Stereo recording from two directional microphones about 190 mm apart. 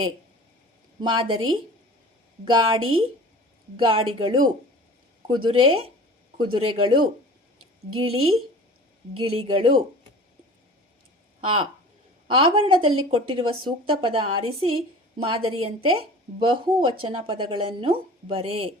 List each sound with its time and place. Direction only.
1.0 s speech: 25° right (ahead or behind)
11.3 s speech: 25° right (ahead or behind)